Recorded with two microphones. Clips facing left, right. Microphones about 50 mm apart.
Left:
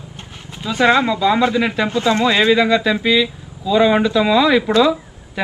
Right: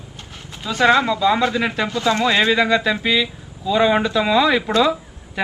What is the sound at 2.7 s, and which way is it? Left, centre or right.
Speech, centre.